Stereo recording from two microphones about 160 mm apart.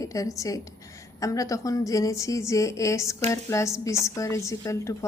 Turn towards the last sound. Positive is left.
turn(degrees=20)  # may be behind; listen again after turning